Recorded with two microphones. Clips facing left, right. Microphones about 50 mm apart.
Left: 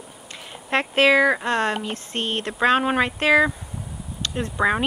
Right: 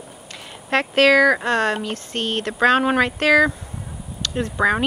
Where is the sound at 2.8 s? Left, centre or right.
Centre.